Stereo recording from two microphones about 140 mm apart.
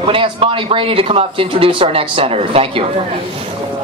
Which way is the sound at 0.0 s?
40° right (ahead or behind).